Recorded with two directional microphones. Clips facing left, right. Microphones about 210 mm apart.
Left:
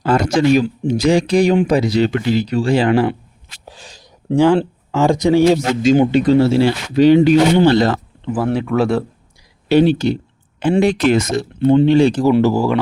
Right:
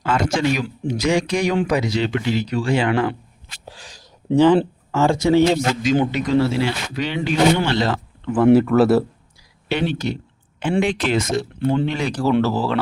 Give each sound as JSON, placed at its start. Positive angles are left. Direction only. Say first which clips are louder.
{"t": 0.0, "sound": "speech", "louder": "left 5 dB", "side_deg": 35}
{"t": 4.4, "sound": "speech", "louder": "left 1 dB", "side_deg": 10}
{"t": 6.1, "sound": "speech", "louder": "left 6 dB", "side_deg": 30}
{"t": 8.5, "sound": "speech", "louder": "right 3 dB", "side_deg": 0}
{"t": 9.6, "sound": "speech", "louder": "left 9 dB", "side_deg": 35}
{"t": 11.6, "sound": "speech", "louder": "left 12 dB", "side_deg": 20}
{"t": 12.4, "sound": "speech", "louder": "left 5 dB", "side_deg": 15}